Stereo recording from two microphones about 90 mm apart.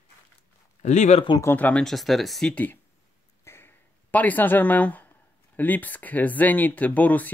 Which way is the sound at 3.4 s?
25° left (ahead or behind).